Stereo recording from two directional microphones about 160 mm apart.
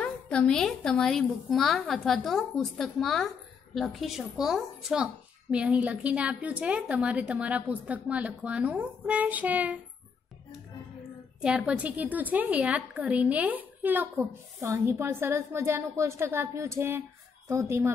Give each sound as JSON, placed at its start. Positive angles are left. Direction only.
{"t": 0.0, "sound": "a woman's voice", "side_deg": 5}
{"t": 11.4, "sound": "a woman's voice", "side_deg": -5}